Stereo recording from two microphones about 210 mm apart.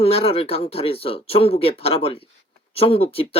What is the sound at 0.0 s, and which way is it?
Speech, 30° left (ahead or behind).